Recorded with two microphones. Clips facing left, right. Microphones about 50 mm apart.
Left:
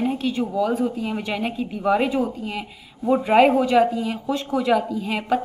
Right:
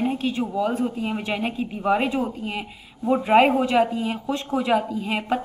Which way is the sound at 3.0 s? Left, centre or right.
Centre.